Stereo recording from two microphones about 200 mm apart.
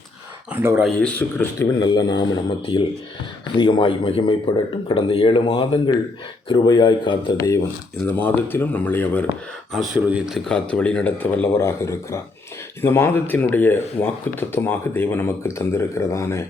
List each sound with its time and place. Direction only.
0.8 s speech: 5° left (ahead or behind)
9.7 s speech: centre (ahead or behind); by 16.4 s 15° left (ahead or behind)